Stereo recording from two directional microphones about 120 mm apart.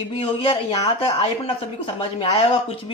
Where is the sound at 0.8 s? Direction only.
60° left (ahead or behind).